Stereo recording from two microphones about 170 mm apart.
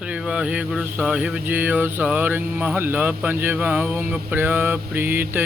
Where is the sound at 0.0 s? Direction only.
5° right (ahead or behind).